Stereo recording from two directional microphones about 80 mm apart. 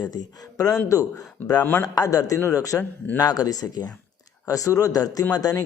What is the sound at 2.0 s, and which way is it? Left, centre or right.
Speech, left.